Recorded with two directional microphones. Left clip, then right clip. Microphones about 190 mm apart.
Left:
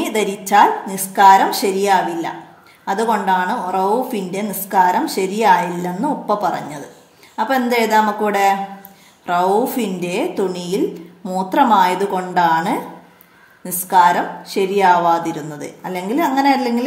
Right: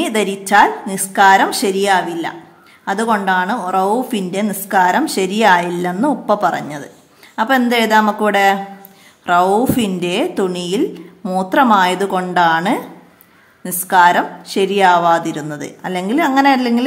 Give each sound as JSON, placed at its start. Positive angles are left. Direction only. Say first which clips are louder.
{"t": 0.0, "sound": "a woman's voice", "louder": "right 2 dB", "side_deg": -20}